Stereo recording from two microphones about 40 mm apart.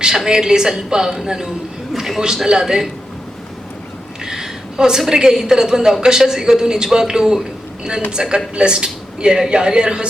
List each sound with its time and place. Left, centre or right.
0.3 s a woman's voice: centre
4.2 s a woman's voice: centre